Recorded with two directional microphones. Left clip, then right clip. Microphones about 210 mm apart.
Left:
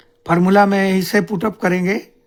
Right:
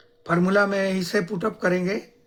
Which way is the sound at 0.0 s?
50° left (ahead or behind).